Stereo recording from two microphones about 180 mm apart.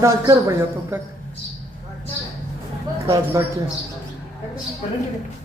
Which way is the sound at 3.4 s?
15° right (ahead or behind).